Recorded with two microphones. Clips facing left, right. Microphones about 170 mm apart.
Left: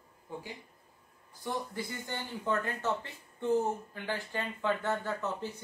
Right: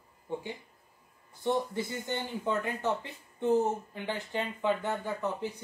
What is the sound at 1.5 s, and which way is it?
Speech, 25° right (ahead or behind).